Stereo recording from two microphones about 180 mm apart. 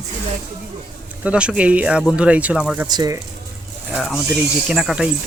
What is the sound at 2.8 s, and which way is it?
Speech, 20° right (ahead or behind).